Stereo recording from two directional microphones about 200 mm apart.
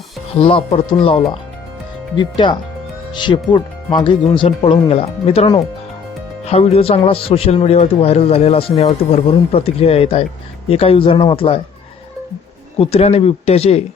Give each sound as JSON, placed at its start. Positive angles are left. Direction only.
{"t": 0.3, "sound": "speech", "side_deg": 25}
{"t": 2.1, "sound": "speech", "side_deg": 20}
{"t": 12.8, "sound": "speech", "side_deg": 30}